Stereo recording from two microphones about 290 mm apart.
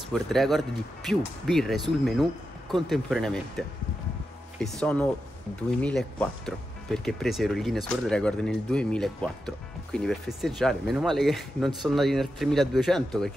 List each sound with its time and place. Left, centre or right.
0.1 s speech: centre